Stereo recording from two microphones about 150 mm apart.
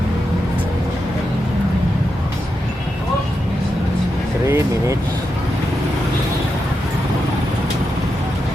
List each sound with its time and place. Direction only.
4.4 s speech: 20° right (ahead or behind)